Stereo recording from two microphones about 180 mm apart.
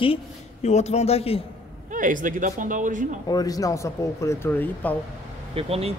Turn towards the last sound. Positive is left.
turn(degrees=-35)  # may be behind; listen again after turning